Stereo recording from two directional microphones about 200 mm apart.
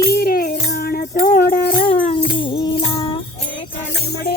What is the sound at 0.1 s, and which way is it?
Music, 50° left (ahead or behind).